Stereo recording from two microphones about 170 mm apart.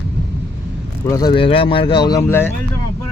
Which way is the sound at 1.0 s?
20° left (ahead or behind).